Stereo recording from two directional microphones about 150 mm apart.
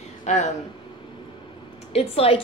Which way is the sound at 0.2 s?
50° left (ahead or behind).